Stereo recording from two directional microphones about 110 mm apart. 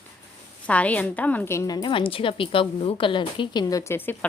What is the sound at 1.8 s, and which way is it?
A woman's voice, 55° left (ahead or behind).